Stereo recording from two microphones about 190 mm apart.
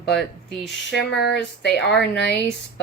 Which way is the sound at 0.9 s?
65° left (ahead or behind).